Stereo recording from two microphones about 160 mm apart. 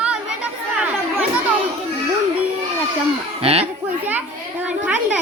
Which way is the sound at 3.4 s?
40° right (ahead or behind).